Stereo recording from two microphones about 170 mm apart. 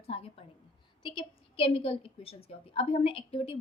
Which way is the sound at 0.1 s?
35° left (ahead or behind).